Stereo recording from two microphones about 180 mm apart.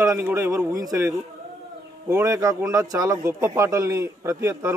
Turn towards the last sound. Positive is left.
turn(degrees=-15)  # may be behind; listen again after turning